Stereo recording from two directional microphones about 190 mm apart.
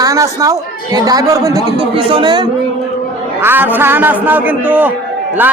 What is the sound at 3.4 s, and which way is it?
A man's voice, 10° right (ahead or behind).